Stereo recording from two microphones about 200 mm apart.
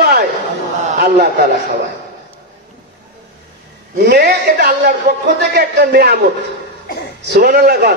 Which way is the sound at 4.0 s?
55° right (ahead or behind).